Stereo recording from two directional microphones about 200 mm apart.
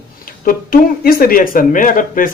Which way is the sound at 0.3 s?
45° left (ahead or behind).